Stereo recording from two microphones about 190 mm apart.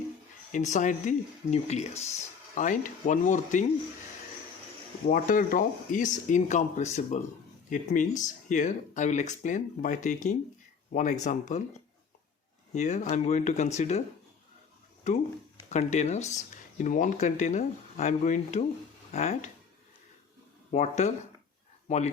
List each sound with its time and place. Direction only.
0.5 s speech: 40° left (ahead or behind)
5.0 s speech: 45° left (ahead or behind)
12.7 s speech: 40° left (ahead or behind)
15.7 s speech: 35° left (ahead or behind)
20.7 s speech: 35° left (ahead or behind)